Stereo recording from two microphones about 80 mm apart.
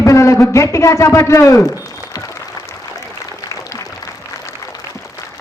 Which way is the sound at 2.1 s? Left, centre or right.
Left.